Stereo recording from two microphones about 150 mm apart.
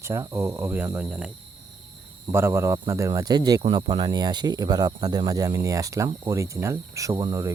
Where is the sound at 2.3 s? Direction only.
15° right (ahead or behind).